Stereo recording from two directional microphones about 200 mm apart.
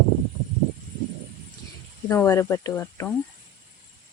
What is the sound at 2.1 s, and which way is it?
Speech, 15° left (ahead or behind).